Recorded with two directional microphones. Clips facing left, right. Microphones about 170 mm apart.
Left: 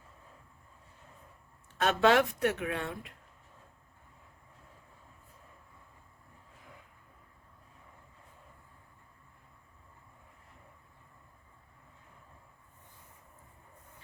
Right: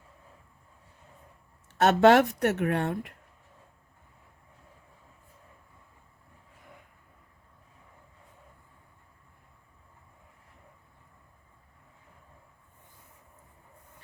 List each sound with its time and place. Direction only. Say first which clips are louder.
1.8 s speech: right 6 dB; 60° right (ahead or behind)